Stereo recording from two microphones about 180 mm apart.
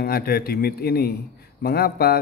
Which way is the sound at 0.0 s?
55° left (ahead or behind).